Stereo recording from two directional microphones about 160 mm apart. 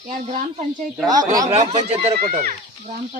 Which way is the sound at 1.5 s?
40° right (ahead or behind).